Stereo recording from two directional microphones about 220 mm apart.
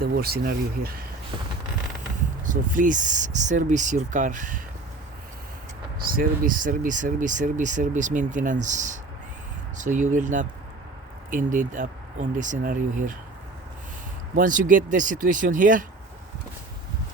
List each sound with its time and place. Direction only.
0.0 s speech: 45° right (ahead or behind)
2.4 s speech: 35° right (ahead or behind)
6.1 s speech: 40° right (ahead or behind)
14.3 s speech: 35° right (ahead or behind)